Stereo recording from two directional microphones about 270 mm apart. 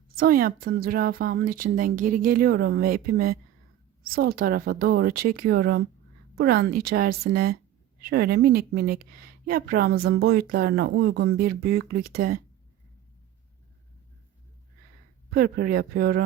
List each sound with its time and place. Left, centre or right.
0.2 s a woman's voice: right
15.3 s a woman's voice: right